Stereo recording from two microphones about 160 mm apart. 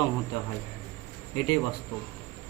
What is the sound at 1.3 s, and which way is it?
Speech, 20° left (ahead or behind).